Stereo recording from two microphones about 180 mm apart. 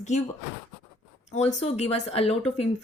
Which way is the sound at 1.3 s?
40° left (ahead or behind).